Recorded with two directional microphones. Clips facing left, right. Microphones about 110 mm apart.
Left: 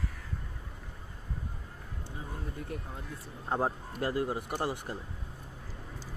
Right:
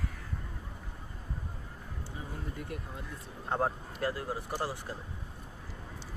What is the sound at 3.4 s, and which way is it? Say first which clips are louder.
Speech: even; 10° left (ahead or behind).